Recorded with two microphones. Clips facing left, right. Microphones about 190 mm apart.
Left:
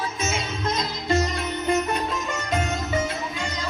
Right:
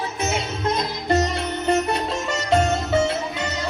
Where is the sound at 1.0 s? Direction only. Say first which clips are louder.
Right 2 dB; 65° right (ahead or behind).